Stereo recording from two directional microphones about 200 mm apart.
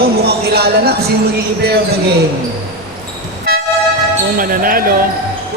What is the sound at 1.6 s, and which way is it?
Speech, 50° right (ahead or behind).